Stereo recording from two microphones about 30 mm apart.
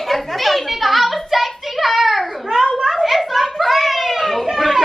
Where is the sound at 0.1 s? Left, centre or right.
Centre.